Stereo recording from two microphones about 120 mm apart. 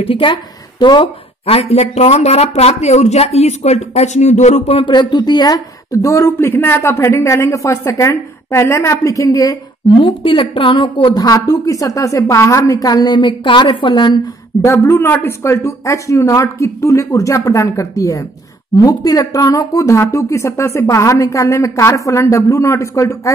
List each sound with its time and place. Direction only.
0.0 s speech: 45° left (ahead or behind)
1.4 s speech: 55° left (ahead or behind); by 9.6 s 30° left (ahead or behind)
9.9 s a woman's voice: 45° left (ahead or behind)
11.1 s speech: 30° left (ahead or behind)
14.6 s speech: 20° left (ahead or behind)